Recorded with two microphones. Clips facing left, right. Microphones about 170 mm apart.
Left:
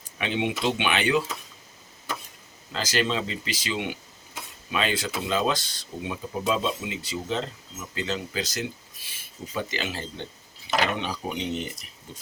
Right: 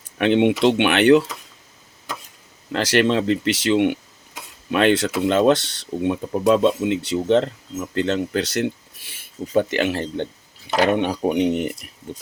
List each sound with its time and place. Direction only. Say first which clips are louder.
0.2 s speech: right 11 dB; 65° right (ahead or behind)
2.7 s speech: right 8 dB; 70° right (ahead or behind)